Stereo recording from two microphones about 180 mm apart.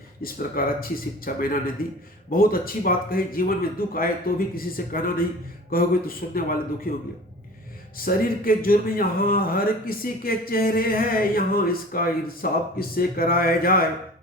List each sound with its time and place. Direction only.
0.2 s speech: 55° left (ahead or behind)